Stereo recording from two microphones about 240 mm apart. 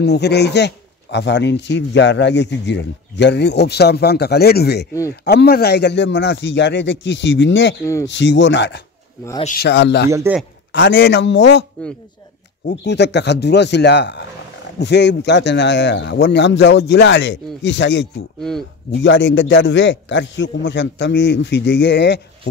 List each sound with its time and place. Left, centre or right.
0.0 s speech: left
7.8 s speech: centre
8.1 s speech: left
10.0 s a man's voice: centre
10.7 s speech: left
12.6 s speech: left
18.4 s speech: centre
18.9 s speech: left